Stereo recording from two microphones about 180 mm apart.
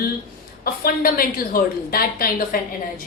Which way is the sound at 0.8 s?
55° left (ahead or behind).